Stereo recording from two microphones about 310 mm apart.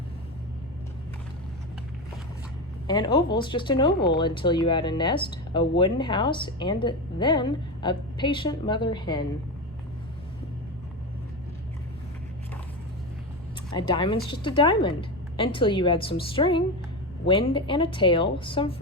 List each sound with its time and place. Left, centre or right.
2.8 s speech: centre
13.7 s speech: centre